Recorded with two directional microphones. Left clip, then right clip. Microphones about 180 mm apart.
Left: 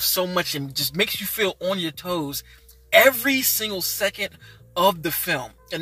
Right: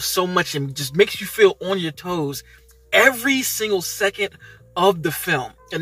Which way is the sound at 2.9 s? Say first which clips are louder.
Even; 20° left (ahead or behind).